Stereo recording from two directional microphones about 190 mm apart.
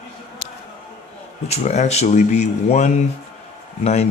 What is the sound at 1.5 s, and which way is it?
Speech, 35° left (ahead or behind).